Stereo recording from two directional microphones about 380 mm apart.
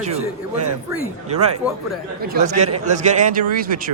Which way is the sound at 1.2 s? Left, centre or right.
Centre.